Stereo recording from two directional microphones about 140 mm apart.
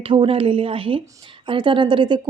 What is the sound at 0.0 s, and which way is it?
Speech, 40° right (ahead or behind).